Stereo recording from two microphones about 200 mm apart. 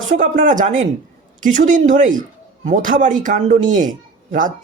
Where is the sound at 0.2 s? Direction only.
40° right (ahead or behind).